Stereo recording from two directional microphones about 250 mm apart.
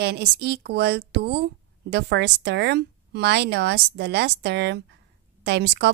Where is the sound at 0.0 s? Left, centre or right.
Right.